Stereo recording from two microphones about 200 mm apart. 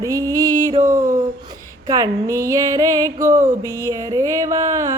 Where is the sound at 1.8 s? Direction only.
15° right (ahead or behind).